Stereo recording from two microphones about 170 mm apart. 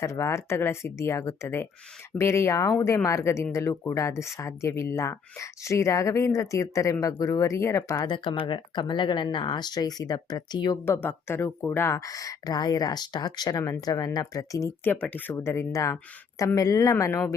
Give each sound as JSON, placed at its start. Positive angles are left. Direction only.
{"t": 0.0, "sound": "speech", "side_deg": 15}
{"t": 8.0, "sound": "speech", "side_deg": 30}
{"t": 10.8, "sound": "speech", "side_deg": 10}